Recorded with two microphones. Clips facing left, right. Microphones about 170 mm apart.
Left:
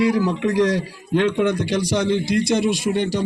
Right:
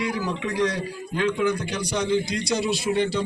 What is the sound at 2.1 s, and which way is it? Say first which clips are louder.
A man's voice: left 3 dB; 55° left (ahead or behind).